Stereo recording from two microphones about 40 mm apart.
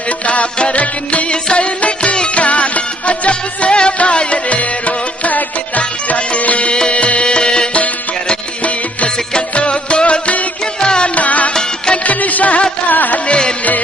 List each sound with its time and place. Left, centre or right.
0.3 s music: left
9.3 s music: left
11.1 s music: left
13.2 s music: left